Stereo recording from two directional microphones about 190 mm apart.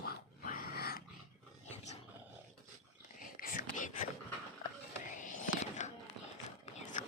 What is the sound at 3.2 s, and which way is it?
Whispering, 45° left (ahead or behind).